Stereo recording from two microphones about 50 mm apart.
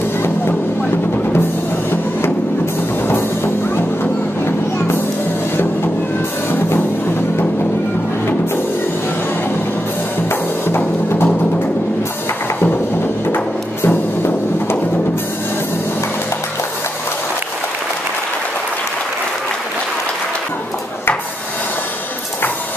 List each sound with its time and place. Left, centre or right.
3.1 s music: left
10.7 s music: left
13.8 s music: left